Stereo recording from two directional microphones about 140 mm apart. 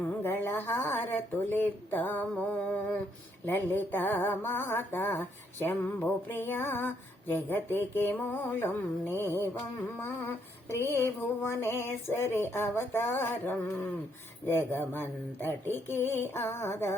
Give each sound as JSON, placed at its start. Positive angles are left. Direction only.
{"t": 0.2, "sound": "speech", "side_deg": 15}
{"t": 3.4, "sound": "mantra", "side_deg": 15}